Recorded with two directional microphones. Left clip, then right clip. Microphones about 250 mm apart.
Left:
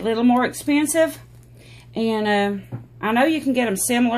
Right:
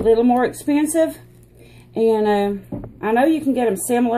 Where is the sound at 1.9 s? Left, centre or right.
Left.